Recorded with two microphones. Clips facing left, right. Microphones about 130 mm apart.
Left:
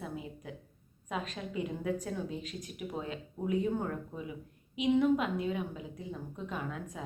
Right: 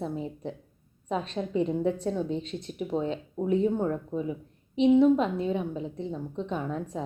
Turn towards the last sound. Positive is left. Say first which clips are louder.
# right 7 dB
turn(degrees=-35)  # may be behind; listen again after turning